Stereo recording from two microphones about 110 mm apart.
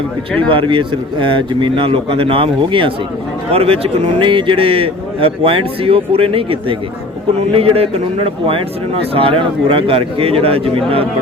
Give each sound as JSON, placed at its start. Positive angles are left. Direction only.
{"t": 0.5, "sound": "a man's voice", "side_deg": -50}